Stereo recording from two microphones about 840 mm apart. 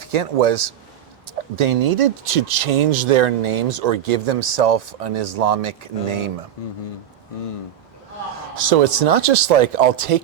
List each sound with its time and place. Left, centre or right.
0.1 s speech: right
8.5 s speech: right